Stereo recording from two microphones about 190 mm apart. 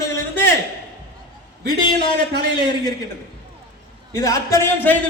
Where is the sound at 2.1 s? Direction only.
60° right (ahead or behind).